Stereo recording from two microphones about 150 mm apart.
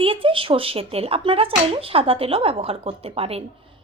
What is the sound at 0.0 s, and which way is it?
Speech, 35° right (ahead or behind).